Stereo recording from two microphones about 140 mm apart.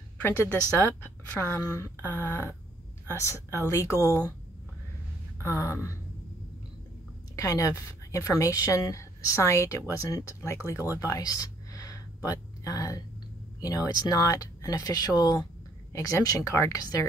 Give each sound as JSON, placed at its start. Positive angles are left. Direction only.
{"t": 0.2, "sound": "a woman's voice", "side_deg": 15}
{"t": 5.4, "sound": "speech", "side_deg": 20}
{"t": 7.3, "sound": "speech", "side_deg": 25}